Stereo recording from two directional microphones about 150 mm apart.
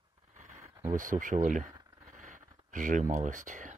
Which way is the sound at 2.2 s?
60° right (ahead or behind).